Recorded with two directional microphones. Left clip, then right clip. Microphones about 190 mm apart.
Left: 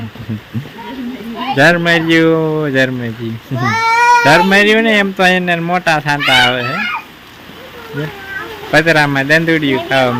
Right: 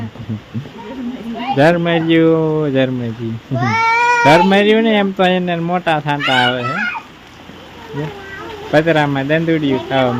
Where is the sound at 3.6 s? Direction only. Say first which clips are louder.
Left 2 dB; 35° right (ahead or behind).